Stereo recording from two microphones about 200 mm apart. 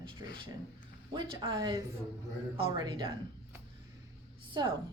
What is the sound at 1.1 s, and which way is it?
Speech, 25° right (ahead or behind).